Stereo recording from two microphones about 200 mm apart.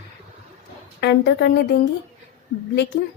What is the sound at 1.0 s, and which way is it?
Speech, 55° left (ahead or behind).